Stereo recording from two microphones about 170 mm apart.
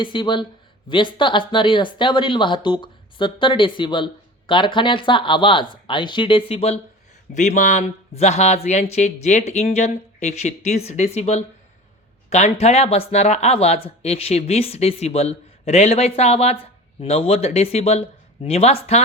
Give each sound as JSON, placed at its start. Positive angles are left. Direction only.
{"t": 0.0, "sound": "speech", "side_deg": 30}
{"t": 7.3, "sound": "speech", "side_deg": 45}